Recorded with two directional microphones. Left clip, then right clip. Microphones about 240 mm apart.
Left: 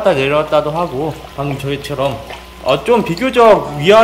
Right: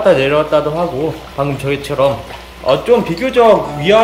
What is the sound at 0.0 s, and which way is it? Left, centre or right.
Speech, centre.